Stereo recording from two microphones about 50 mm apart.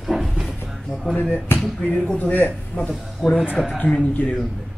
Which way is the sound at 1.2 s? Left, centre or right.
Left.